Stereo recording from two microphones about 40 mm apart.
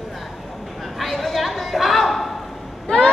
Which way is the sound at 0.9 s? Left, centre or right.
Centre.